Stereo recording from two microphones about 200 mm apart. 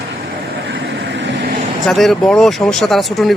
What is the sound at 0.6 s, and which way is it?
Vehicle, 60° right (ahead or behind).